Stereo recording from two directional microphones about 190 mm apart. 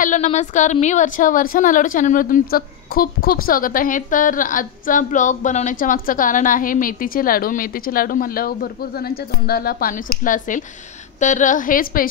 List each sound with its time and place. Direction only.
0.0 s a woman's voice: 40° left (ahead or behind)